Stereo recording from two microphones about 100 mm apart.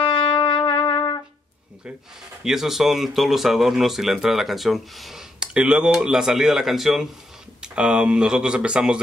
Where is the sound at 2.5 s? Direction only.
5° right (ahead or behind).